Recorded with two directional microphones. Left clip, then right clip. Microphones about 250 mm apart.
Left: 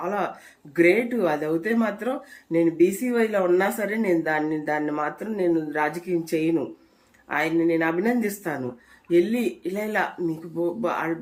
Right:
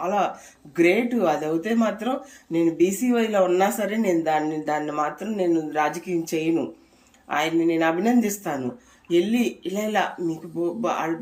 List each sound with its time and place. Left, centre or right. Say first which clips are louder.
0.0 s speech: right 4 dB; centre